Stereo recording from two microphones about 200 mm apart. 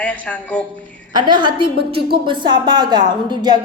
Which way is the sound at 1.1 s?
25° right (ahead or behind).